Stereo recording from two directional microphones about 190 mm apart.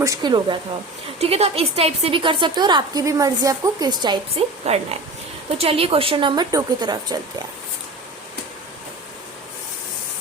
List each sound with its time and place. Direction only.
0.0 s a woman's voice: 20° right (ahead or behind)